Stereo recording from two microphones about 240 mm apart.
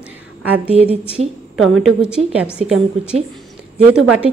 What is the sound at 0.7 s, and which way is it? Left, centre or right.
Speech, right.